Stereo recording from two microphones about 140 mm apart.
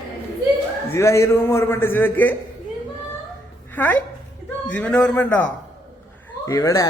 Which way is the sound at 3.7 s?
15° left (ahead or behind).